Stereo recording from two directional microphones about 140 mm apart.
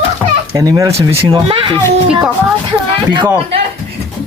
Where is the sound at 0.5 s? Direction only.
25° right (ahead or behind).